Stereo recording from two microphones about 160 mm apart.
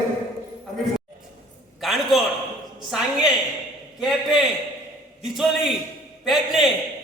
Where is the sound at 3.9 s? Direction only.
5° right (ahead or behind).